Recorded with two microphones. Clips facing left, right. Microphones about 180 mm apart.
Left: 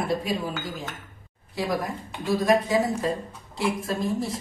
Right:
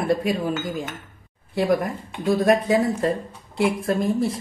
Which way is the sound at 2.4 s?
55° right (ahead or behind).